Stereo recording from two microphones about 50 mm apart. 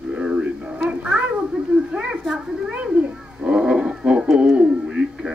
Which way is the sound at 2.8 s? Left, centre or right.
Right.